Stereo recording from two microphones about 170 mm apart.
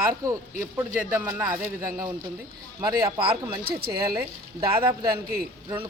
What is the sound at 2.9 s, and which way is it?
Speech, 25° right (ahead or behind).